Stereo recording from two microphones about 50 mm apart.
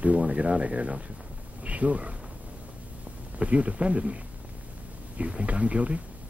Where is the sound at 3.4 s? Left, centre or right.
Right.